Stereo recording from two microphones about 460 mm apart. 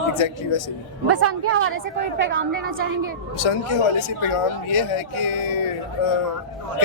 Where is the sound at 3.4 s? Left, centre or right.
Left.